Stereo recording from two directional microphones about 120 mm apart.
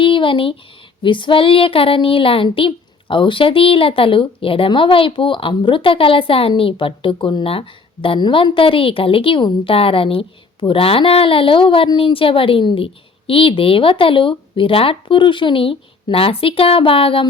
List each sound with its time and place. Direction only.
0.0 s speech: 45° left (ahead or behind)